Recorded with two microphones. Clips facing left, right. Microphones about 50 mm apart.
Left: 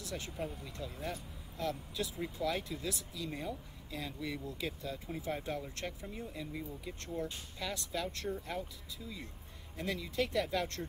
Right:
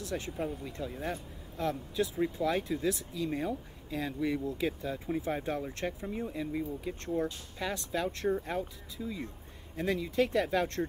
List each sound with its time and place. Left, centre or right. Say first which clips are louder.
0.0 s speech: right 5 dB; right